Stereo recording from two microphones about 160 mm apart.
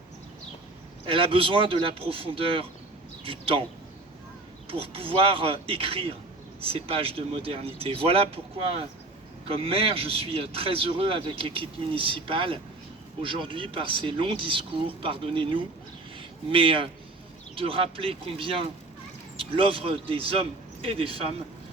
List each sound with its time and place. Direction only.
1.0 s speech: 35° right (ahead or behind)
4.7 s speech: 35° right (ahead or behind)
9.5 s speech: 35° right (ahead or behind)